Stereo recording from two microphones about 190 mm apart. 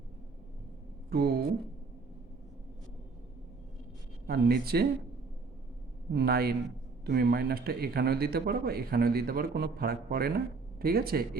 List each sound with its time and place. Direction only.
1.1 s a man's voice: 55° right (ahead or behind)
4.3 s a man's voice: 55° right (ahead or behind)
6.1 s a man's voice: 55° right (ahead or behind)